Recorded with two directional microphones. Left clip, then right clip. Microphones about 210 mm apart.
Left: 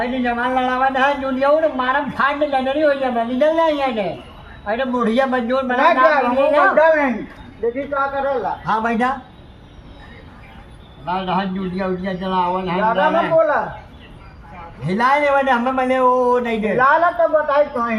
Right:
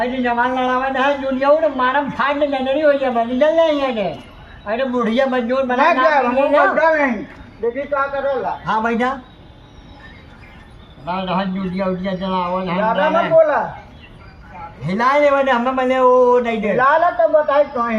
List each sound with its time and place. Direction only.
0.0 s a man's voice: centre (ahead or behind)
7.6 s a man's voice: 10° right (ahead or behind)
8.6 s a man's voice: centre (ahead or behind)
11.0 s a man's voice: centre (ahead or behind)
14.8 s a man's voice: centre (ahead or behind)